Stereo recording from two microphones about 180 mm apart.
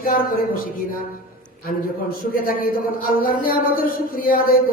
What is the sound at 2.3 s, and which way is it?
Speech, 55° left (ahead or behind).